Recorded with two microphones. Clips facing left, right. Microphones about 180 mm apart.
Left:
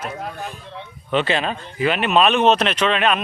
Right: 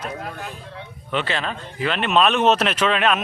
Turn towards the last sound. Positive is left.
turn(degrees=0)  # may be behind; listen again after turning